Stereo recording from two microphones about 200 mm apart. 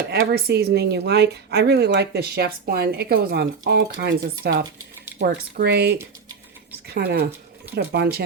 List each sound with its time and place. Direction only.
0.1 s a woman's voice: 50° right (ahead or behind)